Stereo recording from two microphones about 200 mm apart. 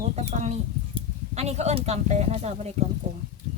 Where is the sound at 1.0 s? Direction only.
35° right (ahead or behind).